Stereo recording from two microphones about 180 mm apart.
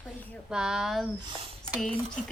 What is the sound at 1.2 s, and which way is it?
Speech, 25° right (ahead or behind).